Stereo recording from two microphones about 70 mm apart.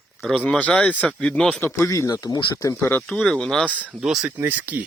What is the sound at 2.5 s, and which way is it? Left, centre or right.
Speech, left.